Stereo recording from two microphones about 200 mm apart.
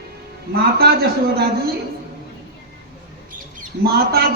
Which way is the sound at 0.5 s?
50° right (ahead or behind).